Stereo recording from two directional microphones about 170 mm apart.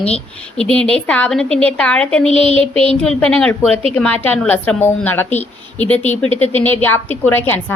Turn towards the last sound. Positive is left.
turn(degrees=10)  # may be behind; listen again after turning